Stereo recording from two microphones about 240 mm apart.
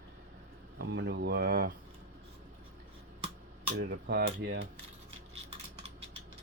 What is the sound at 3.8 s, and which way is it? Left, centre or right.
Speech, right.